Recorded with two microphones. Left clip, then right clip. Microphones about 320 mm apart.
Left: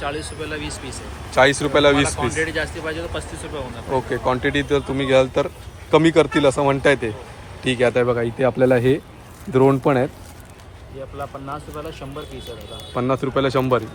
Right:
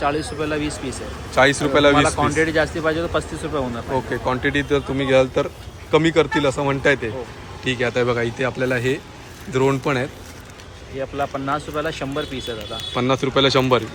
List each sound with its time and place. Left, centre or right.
0.0 s speech: right
1.3 s speech: centre
2.0 s speech: right
3.9 s speech: centre
11.2 s speech: right
12.9 s speech: centre